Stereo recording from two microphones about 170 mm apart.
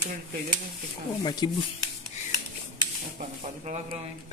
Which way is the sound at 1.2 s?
25° left (ahead or behind).